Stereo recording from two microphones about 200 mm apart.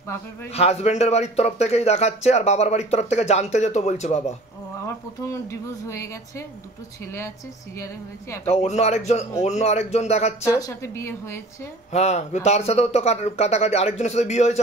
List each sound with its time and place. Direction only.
0.5 s speech: 30° left (ahead or behind)
4.8 s speech: 15° left (ahead or behind)
8.5 s speech: 35° left (ahead or behind)
10.4 s speech: 15° left (ahead or behind)
11.9 s speech: 35° left (ahead or behind)